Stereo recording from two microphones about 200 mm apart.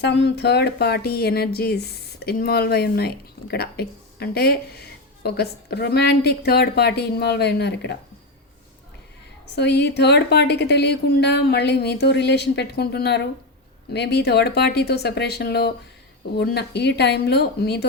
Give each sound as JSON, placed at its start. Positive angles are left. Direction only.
{"t": 0.0, "sound": "speech", "side_deg": 55}
{"t": 9.6, "sound": "a woman's voice", "side_deg": 55}